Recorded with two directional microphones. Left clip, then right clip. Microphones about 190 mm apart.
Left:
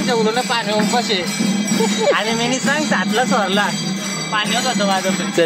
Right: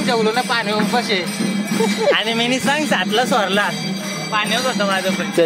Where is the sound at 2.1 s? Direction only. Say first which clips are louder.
Even; 55° right (ahead or behind).